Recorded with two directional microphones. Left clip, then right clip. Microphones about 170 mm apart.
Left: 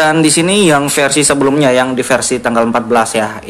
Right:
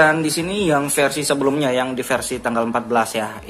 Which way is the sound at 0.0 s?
15° left (ahead or behind).